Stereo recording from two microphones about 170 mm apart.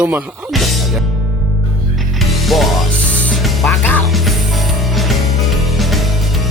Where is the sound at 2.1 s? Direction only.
Centre (ahead or behind).